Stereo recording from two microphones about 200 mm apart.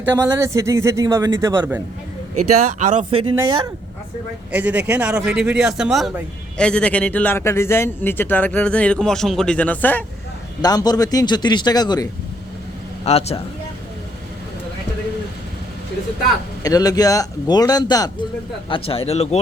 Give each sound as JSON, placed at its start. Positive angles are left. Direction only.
{"t": 0.1, "sound": "a man's voice", "side_deg": -15}
{"t": 2.6, "sound": "speech", "side_deg": -35}
{"t": 4.5, "sound": "speech", "side_deg": -10}
{"t": 10.6, "sound": "a man's voice", "side_deg": 20}
{"t": 13.1, "sound": "speech", "side_deg": 30}
{"t": 16.6, "sound": "a man's voice", "side_deg": 20}